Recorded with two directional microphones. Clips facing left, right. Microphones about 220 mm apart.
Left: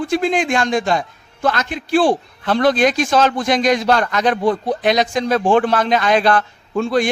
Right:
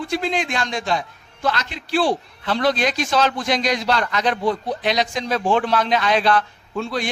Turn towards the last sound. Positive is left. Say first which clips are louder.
# left 8 dB
turn(degrees=50)  # may be behind; listen again after turning